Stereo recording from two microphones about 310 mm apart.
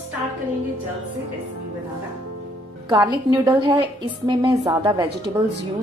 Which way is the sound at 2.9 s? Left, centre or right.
Centre.